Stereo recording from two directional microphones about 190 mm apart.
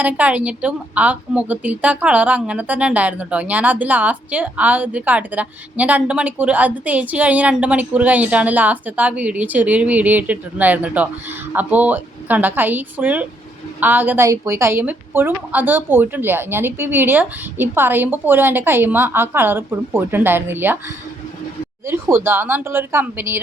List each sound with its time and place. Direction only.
0.0 s a woman's voice: 5° right (ahead or behind)
21.8 s a woman's voice: 10° right (ahead or behind)